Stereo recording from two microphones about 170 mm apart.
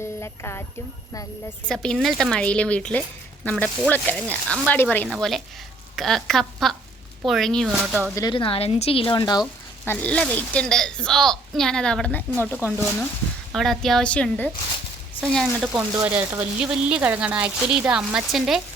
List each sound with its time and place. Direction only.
0.0 s speech: 15° left (ahead or behind)
1.6 s a woman's voice: 5° left (ahead or behind)
5.0 s a woman's voice: centre (ahead or behind)
8.1 s speech: 20° left (ahead or behind)
8.4 s a woman's voice: 35° left (ahead or behind)
9.8 s a woman's voice: 10° left (ahead or behind)
16.0 s speech: 10° right (ahead or behind)